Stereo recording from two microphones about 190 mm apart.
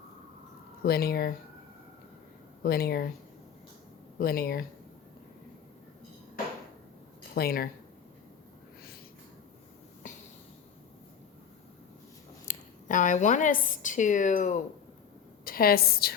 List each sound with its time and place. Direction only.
0.8 s speech: 55° left (ahead or behind)
2.6 s speech: 55° left (ahead or behind)
4.2 s speech: 55° left (ahead or behind)
7.3 s speech: 50° left (ahead or behind)
12.5 s a woman's voice: 40° left (ahead or behind)
15.4 s a woman's voice: 50° left (ahead or behind)